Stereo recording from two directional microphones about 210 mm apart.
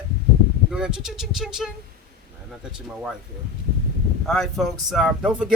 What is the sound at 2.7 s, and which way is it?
Speech, 5° right (ahead or behind).